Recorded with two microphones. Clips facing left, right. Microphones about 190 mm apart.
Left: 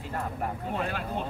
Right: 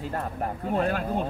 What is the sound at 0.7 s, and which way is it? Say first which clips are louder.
Speech: right 9 dB; 45° right (ahead or behind).